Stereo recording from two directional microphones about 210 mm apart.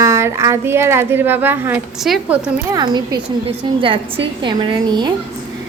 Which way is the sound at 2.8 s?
20° right (ahead or behind).